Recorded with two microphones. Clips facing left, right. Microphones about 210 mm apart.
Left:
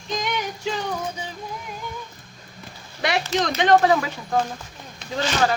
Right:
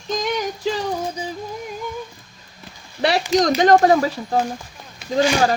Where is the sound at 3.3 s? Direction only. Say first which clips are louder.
Right 4 dB; 40° right (ahead or behind).